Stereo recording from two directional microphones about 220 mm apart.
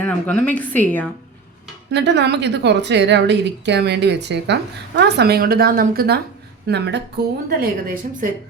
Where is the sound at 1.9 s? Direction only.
50° right (ahead or behind).